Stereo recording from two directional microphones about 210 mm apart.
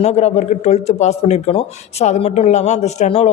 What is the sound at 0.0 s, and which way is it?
Speech, 30° left (ahead or behind).